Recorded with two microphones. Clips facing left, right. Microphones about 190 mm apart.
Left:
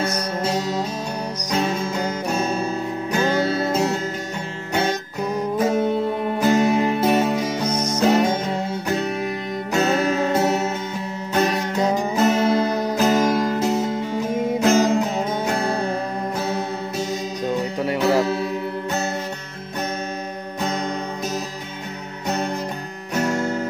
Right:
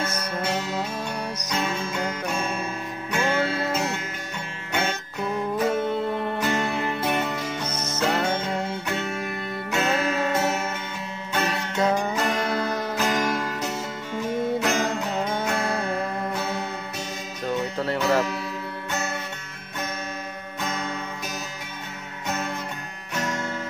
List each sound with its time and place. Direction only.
0.0 s music: 35° left (ahead or behind)
5.3 s music: 40° left (ahead or behind)
7.7 s music: 15° left (ahead or behind)
8.8 s music: 35° left (ahead or behind)
17.5 s music: 15° left (ahead or behind)
23.1 s guitar: 40° left (ahead or behind)